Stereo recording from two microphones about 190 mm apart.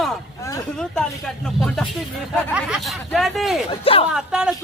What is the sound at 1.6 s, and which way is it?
Speech, 5° left (ahead or behind).